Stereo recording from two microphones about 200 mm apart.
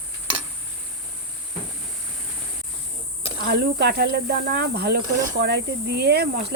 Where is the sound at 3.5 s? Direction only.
55° right (ahead or behind).